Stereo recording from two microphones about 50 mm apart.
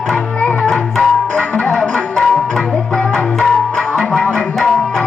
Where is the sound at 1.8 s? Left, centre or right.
Centre.